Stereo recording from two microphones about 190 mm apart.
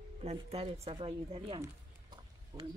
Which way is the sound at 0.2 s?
35° right (ahead or behind).